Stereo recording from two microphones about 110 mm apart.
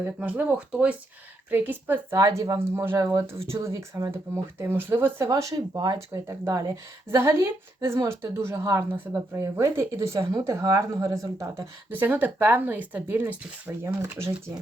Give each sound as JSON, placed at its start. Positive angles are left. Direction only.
{"t": 0.0, "sound": "speech", "side_deg": -15}
{"t": 2.1, "sound": "speech", "side_deg": -30}
{"t": 4.6, "sound": "speech", "side_deg": -20}
{"t": 5.3, "sound": "speech", "side_deg": -30}